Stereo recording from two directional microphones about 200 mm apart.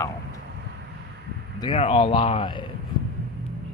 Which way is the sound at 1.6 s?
25° left (ahead or behind).